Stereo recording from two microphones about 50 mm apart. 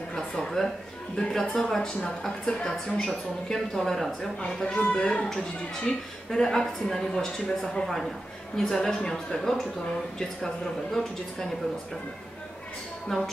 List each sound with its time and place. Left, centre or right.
0.1 s a sound: centre
1.1 s speech: centre
3.5 s speech: centre
13.1 s speech: centre